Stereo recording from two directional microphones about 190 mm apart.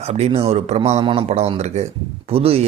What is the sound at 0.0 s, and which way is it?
A man's voice, 35° right (ahead or behind).